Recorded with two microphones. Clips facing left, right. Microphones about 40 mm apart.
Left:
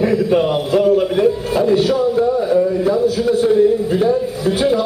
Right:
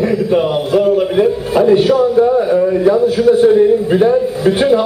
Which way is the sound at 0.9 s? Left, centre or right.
Centre.